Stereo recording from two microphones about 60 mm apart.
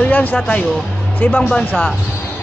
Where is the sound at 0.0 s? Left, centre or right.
Left.